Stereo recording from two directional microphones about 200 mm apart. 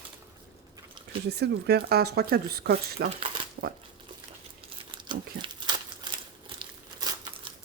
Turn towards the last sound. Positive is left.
turn(degrees=-25)  # may be behind; listen again after turning